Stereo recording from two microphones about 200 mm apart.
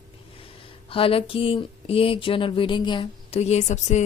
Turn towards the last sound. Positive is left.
turn(degrees=35)  # may be behind; listen again after turning